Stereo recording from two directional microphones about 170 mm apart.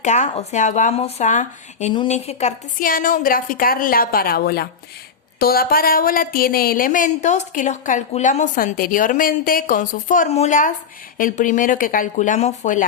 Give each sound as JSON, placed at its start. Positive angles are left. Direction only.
{"t": 0.0, "sound": "speech", "side_deg": 45}
{"t": 1.9, "sound": "a woman's voice", "side_deg": 35}